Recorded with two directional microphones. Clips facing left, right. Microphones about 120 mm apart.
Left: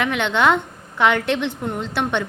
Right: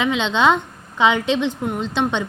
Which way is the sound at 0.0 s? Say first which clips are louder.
Right 1 dB; 20° right (ahead or behind).